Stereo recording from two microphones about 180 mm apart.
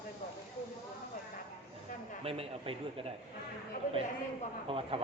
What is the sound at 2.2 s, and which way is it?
Speech, 35° right (ahead or behind).